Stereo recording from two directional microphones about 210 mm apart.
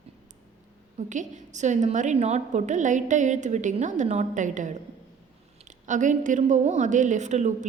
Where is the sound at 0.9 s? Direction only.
35° right (ahead or behind).